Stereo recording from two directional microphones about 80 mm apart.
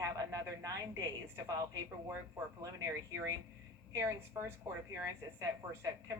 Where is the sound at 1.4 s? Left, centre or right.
Right.